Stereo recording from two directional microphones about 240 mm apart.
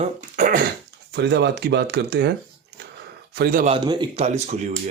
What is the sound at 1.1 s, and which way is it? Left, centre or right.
Speech, right.